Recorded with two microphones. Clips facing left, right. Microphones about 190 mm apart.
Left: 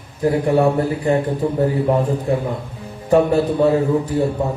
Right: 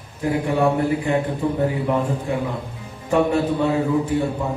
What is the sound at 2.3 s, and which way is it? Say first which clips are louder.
Speech: left 5 dB; 35° left (ahead or behind).